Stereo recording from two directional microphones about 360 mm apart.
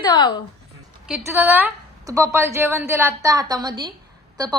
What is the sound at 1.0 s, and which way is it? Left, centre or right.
A woman's voice, centre.